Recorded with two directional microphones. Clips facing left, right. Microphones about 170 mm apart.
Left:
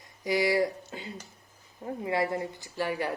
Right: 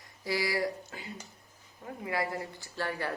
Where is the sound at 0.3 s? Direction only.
20° left (ahead or behind).